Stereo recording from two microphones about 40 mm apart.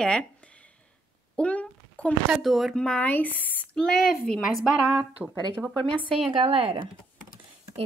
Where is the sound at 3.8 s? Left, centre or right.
Centre.